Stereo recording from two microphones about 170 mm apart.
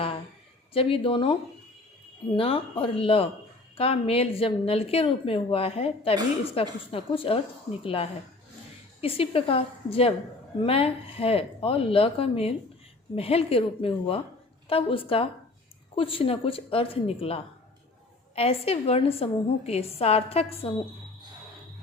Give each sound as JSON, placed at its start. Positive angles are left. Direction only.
{"t": 0.7, "sound": "a woman's voice", "side_deg": 35}